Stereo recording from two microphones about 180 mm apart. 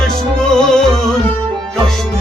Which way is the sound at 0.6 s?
5° left (ahead or behind).